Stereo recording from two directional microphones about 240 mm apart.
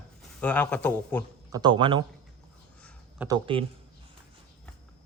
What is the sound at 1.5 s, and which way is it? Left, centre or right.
Speech, centre.